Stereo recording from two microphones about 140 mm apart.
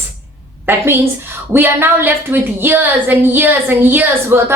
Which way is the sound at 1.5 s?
15° right (ahead or behind).